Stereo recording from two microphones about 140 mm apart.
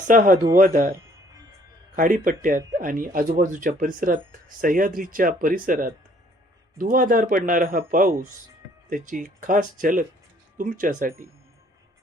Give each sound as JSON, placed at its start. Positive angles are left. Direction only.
{"t": 0.1, "sound": "speech", "side_deg": -70}
{"t": 0.9, "sound": "music", "side_deg": -25}
{"t": 2.0, "sound": "speech", "side_deg": -70}
{"t": 6.7, "sound": "a man's voice", "side_deg": -90}
{"t": 8.9, "sound": "speech", "side_deg": -70}